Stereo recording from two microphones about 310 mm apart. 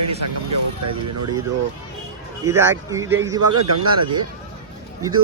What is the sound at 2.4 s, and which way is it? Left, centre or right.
Speech, centre.